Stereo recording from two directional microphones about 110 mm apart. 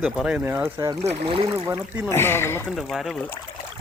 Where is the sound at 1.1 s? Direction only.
55° right (ahead or behind).